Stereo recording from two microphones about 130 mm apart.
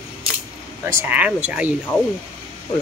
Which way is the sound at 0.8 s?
20° right (ahead or behind).